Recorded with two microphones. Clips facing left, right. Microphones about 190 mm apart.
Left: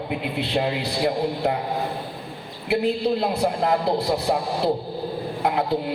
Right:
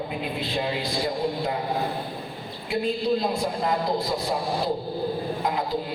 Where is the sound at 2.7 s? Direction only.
70° left (ahead or behind).